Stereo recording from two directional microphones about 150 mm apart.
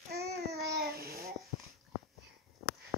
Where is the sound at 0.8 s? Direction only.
85° right.